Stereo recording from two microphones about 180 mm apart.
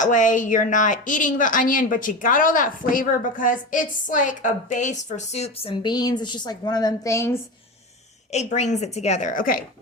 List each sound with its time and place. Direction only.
0.0 s a woman's voice: 45° left (ahead or behind); by 7.3 s 15° left (ahead or behind)
8.3 s a woman's voice: 40° left (ahead or behind)